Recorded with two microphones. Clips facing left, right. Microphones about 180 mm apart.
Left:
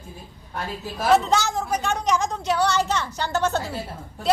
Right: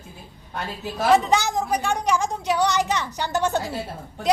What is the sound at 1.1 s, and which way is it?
A woman's voice, 15° right (ahead or behind).